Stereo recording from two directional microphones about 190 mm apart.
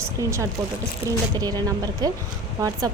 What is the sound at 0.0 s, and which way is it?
Speech, 15° right (ahead or behind).